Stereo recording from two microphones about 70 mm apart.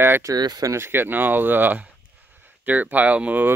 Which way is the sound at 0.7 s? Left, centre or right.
Right.